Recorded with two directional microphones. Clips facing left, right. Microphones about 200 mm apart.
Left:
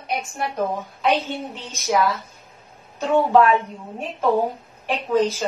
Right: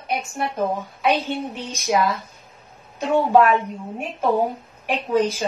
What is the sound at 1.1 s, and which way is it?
Speech, 15° right (ahead or behind).